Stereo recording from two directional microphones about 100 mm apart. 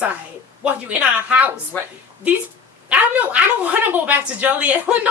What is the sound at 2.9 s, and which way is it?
Speech, 10° right (ahead or behind).